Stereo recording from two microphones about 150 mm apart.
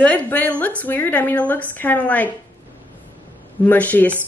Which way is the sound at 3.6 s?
10° left (ahead or behind).